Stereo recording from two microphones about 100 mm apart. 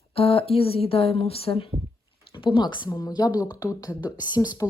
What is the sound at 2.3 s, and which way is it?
Speech, 55° left (ahead or behind).